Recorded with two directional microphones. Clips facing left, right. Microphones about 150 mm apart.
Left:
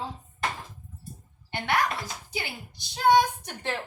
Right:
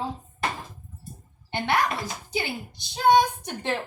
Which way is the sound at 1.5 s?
25° right (ahead or behind).